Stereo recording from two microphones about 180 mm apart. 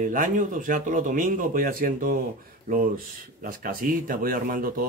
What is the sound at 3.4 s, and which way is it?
Speech, 50° right (ahead or behind).